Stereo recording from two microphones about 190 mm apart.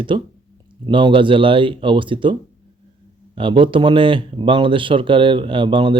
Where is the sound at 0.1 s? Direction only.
25° right (ahead or behind).